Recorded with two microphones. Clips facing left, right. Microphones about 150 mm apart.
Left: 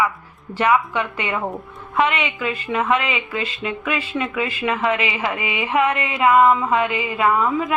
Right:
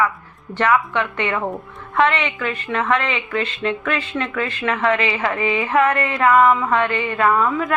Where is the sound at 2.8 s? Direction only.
10° left (ahead or behind).